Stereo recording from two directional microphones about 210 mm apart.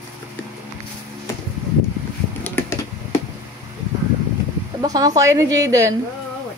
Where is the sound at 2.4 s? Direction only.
10° left (ahead or behind).